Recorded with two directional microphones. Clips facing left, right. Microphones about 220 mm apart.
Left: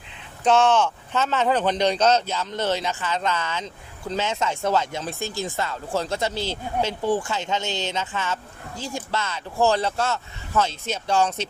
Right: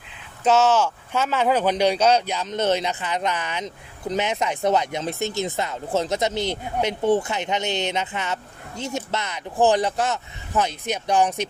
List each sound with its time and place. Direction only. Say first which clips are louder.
0.4 s speech: even; 5° right (ahead or behind)